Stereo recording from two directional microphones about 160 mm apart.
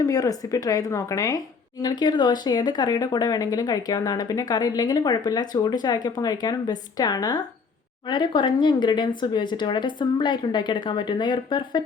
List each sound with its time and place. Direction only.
0.0 s speech: 20° left (ahead or behind)